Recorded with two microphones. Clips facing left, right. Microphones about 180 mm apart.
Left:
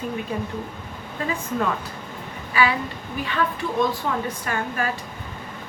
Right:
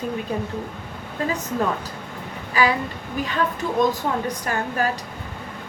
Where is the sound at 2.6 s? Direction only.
40° right (ahead or behind).